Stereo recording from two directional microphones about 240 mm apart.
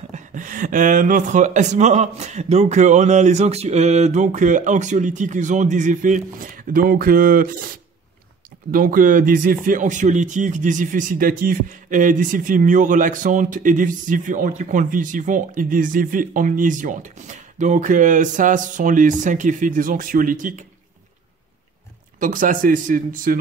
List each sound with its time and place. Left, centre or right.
0.1 s speech: right
8.7 s speech: right
22.2 s speech: right